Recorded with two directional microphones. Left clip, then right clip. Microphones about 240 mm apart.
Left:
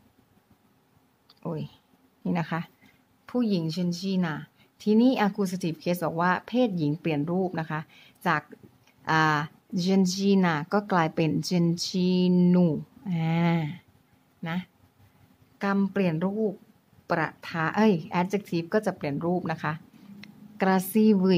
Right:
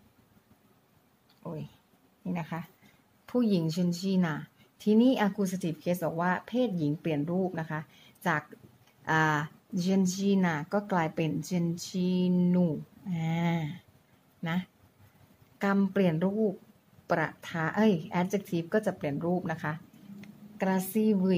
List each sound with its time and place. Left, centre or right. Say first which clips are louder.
1.4 s speech: left 6 dB; left
3.3 s a woman's voice: left 1 dB; centre
14.4 s speech: left 1 dB; centre